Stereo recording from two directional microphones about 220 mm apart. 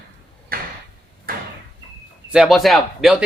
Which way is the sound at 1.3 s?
40° right (ahead or behind).